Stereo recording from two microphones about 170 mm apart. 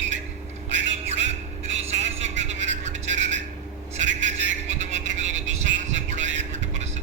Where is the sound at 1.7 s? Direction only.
40° right (ahead or behind).